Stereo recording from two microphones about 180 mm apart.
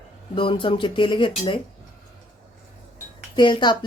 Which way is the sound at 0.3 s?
30° left (ahead or behind).